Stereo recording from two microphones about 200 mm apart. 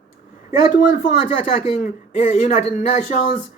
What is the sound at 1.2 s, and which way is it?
Speech, 35° left (ahead or behind).